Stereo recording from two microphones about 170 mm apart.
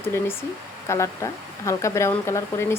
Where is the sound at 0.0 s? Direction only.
15° left (ahead or behind).